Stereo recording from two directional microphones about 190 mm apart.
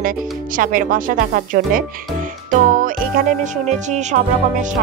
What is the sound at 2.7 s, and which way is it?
Speech, 45° right (ahead or behind).